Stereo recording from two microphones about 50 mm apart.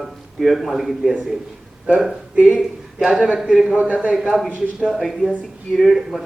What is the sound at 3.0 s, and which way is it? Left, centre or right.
A man's voice, centre.